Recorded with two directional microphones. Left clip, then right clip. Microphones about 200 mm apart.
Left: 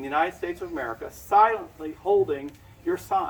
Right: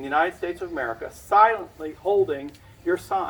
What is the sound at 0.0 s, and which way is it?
Speech, 30° right (ahead or behind).